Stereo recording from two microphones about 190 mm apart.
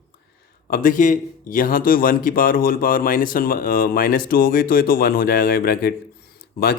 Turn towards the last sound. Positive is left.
turn(degrees=55)  # may be behind; listen again after turning